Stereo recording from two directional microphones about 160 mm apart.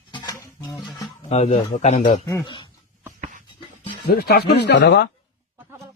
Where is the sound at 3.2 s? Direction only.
55° right (ahead or behind).